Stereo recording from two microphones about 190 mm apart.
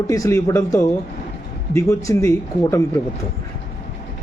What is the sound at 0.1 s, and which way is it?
Speech, 15° left (ahead or behind).